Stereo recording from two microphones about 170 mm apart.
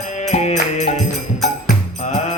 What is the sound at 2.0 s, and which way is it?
Music, 45° left (ahead or behind).